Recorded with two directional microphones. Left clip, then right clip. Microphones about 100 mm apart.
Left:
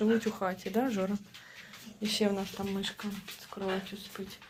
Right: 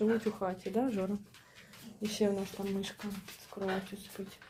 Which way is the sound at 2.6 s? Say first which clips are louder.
Left 1 dB; 10° left (ahead or behind).